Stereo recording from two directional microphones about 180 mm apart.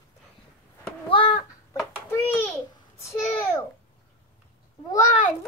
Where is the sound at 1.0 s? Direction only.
30° left (ahead or behind).